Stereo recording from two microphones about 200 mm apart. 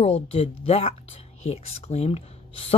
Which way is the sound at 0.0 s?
30° left (ahead or behind).